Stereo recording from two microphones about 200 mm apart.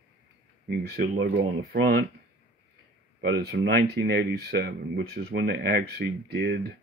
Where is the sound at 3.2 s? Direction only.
60° right (ahead or behind).